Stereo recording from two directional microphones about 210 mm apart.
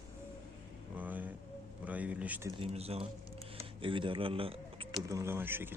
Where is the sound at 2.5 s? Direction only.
30° right (ahead or behind).